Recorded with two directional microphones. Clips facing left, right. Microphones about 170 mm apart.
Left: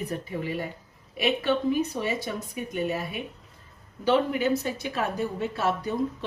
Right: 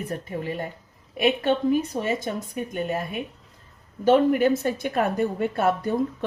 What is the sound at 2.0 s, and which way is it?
A woman's voice, 45° right (ahead or behind).